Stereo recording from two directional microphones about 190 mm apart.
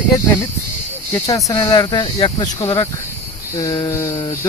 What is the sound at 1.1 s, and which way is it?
Speech, 15° left (ahead or behind).